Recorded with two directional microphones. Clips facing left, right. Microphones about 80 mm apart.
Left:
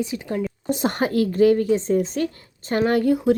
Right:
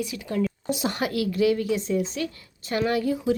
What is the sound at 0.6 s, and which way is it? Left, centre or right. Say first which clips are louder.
A woman's voice: left 4 dB; left.